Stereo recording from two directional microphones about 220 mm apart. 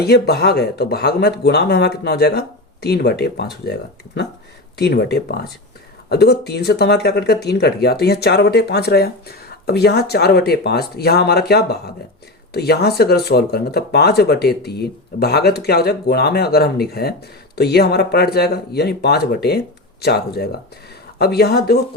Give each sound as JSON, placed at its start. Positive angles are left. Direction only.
{"t": 0.0, "sound": "speech", "side_deg": 45}